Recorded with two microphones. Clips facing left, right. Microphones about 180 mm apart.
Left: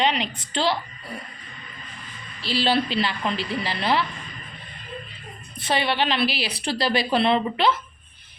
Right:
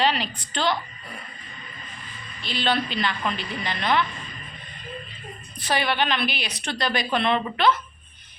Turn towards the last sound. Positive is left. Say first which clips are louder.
# left 1 dB
turn(degrees=25)  # may be behind; listen again after turning